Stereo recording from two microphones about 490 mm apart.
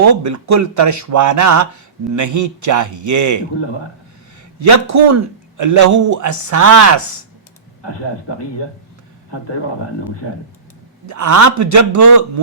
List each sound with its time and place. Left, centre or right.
0.0 s speech: right
4.6 s speech: right
11.0 s speech: right